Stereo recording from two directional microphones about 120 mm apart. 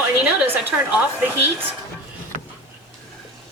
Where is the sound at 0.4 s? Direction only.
15° right (ahead or behind).